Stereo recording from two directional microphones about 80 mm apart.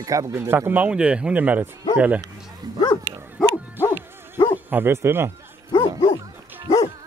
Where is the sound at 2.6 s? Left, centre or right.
Right.